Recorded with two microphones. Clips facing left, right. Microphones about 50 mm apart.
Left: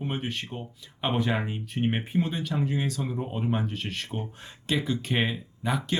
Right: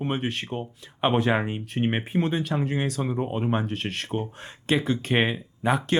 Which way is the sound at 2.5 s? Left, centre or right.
Right.